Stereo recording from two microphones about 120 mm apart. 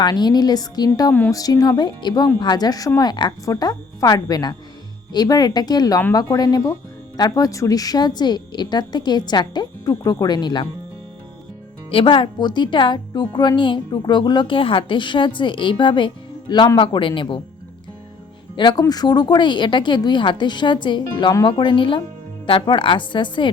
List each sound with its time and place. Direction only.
0.0 s speech: 35° left (ahead or behind)
11.9 s speech: 45° left (ahead or behind)
18.5 s a woman's voice: 40° left (ahead or behind)